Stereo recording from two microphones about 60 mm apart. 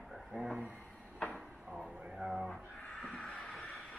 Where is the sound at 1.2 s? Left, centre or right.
Centre.